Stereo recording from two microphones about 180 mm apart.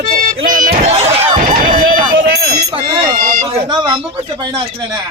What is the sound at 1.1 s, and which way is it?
Run, 45° right (ahead or behind).